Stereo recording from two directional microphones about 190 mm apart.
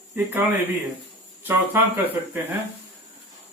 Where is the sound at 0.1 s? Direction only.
10° right (ahead or behind).